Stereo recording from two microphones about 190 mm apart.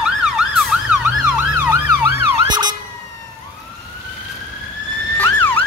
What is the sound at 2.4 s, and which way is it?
Emergency vehicle, 20° right (ahead or behind).